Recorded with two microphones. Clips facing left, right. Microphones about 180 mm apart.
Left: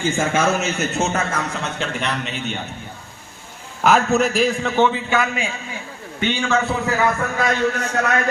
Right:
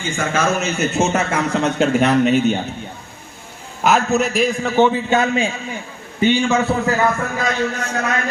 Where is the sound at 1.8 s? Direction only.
45° right (ahead or behind).